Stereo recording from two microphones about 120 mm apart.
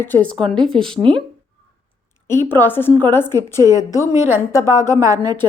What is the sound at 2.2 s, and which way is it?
A woman's voice, 20° left (ahead or behind).